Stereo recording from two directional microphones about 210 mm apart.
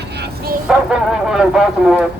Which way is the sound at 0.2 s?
45° right (ahead or behind).